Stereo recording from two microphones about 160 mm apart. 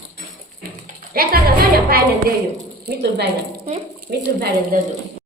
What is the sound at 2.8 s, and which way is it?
Speech, 90° right.